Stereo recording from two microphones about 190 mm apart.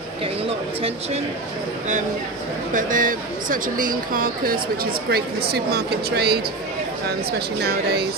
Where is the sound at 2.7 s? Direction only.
45° right (ahead or behind).